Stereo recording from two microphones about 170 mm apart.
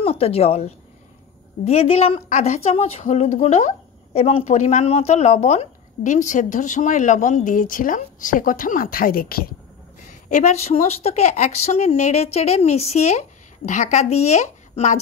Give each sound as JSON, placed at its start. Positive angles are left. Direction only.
{"t": 0.0, "sound": "a woman's voice", "side_deg": 35}
{"t": 10.0, "sound": "a woman's voice", "side_deg": 45}